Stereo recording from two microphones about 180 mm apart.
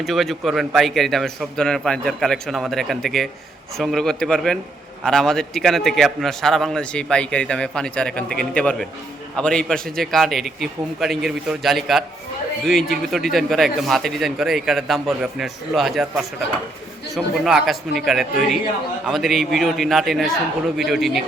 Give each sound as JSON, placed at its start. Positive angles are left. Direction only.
{"t": 0.0, "sound": "a man's voice", "side_deg": 0}